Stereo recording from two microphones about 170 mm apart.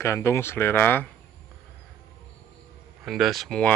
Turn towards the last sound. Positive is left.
turn(degrees=5)  # may be behind; listen again after turning